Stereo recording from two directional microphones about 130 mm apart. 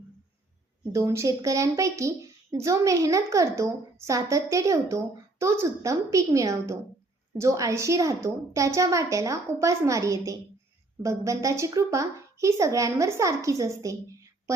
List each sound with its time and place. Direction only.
0.9 s a woman's voice: 25° right (ahead or behind)